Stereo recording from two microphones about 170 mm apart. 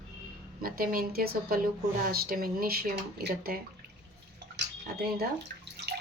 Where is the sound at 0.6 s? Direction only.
60° right (ahead or behind).